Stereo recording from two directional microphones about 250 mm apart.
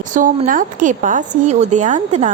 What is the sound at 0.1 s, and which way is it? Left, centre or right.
Speech, right.